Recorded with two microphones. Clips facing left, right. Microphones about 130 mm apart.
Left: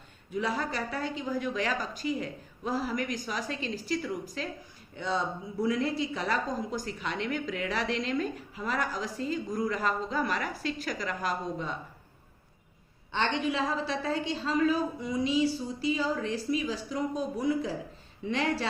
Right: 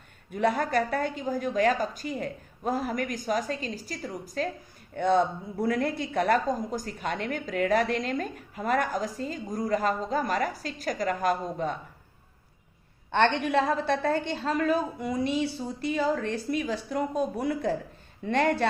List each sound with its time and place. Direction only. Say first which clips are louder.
0.3 s a woman's voice: right 5 dB; 55° right (ahead or behind)
4.9 s a woman's voice: right 8 dB; 55° right (ahead or behind)
13.1 s a woman's voice: right 5 dB; 60° right (ahead or behind)